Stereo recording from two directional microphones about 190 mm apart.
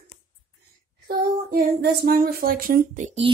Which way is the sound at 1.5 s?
50° right (ahead or behind).